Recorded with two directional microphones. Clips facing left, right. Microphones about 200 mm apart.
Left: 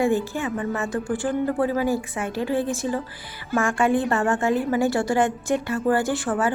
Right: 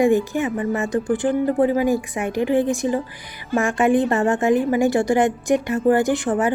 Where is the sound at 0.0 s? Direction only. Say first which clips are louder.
Right 5 dB; 15° right (ahead or behind).